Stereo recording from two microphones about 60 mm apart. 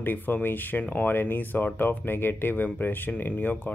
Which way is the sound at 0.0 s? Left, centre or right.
Left.